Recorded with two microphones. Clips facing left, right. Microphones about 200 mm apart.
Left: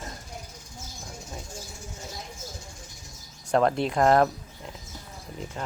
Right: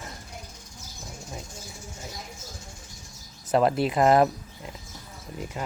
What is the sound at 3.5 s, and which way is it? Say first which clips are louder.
Speech: right 1 dB; 5° right (ahead or behind).